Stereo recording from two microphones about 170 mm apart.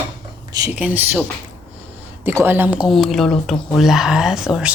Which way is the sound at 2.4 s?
10° right (ahead or behind).